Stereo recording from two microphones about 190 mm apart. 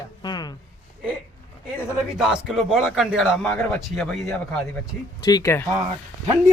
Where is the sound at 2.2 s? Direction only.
5° right (ahead or behind).